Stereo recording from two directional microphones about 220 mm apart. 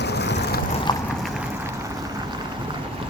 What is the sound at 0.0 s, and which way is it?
Boat, 50° left (ahead or behind).